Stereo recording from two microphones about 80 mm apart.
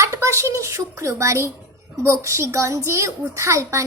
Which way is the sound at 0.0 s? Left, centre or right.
Right.